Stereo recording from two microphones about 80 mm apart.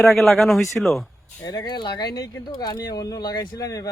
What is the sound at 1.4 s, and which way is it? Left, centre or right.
Speech, left.